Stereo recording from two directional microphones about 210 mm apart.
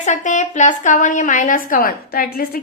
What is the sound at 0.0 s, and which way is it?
A woman's voice, 35° left (ahead or behind).